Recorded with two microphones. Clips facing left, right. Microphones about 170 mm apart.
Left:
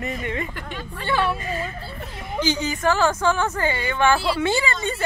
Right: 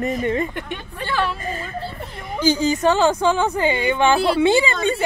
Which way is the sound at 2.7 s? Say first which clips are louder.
Right 4 dB; 25° right (ahead or behind).